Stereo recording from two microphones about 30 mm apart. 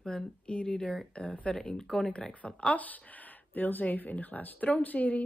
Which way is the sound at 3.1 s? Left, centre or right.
Left.